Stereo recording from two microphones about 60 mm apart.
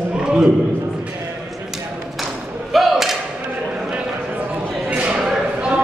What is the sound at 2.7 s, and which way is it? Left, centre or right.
Thump, centre.